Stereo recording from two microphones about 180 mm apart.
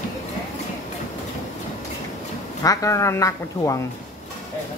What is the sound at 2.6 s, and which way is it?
Speech, 20° left (ahead or behind).